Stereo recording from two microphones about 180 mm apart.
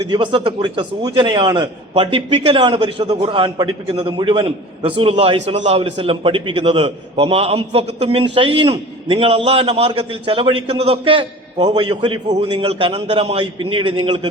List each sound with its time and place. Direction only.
0.1 s a man's voice: 25° right (ahead or behind)